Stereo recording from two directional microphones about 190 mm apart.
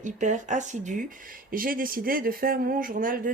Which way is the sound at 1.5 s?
50° right (ahead or behind).